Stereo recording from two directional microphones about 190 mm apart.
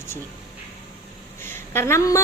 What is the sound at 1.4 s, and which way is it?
Speech, 10° left (ahead or behind).